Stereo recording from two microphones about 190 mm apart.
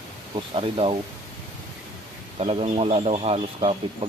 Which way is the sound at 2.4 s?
35° right (ahead or behind).